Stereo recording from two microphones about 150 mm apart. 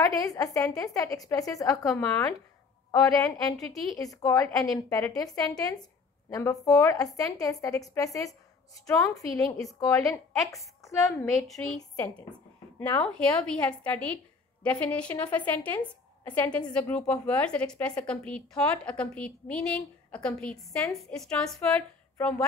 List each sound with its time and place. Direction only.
0.1 s a woman's voice: 25° left (ahead or behind)
11.4 s a woman's voice: centre (ahead or behind)
12.8 s a woman's voice: 10° left (ahead or behind)